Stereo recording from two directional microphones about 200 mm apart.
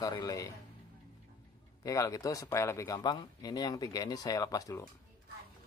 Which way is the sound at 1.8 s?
15° left (ahead or behind).